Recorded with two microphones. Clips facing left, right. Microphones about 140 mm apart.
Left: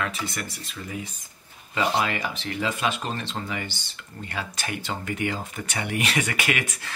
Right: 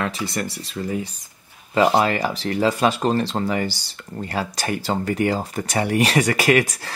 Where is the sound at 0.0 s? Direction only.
35° right (ahead or behind).